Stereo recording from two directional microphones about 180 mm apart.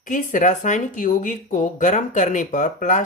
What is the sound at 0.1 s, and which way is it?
Speech, 45° left (ahead or behind).